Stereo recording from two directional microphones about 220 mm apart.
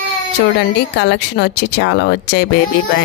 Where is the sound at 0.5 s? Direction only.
50° left (ahead or behind).